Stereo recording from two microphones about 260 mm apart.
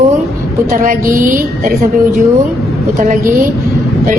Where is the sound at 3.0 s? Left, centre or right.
Right.